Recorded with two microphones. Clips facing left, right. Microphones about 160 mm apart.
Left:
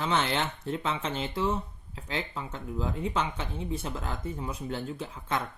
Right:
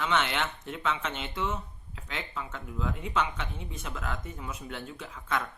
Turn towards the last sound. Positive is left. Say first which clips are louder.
# left 1 dB
turn(degrees=30)  # may be behind; listen again after turning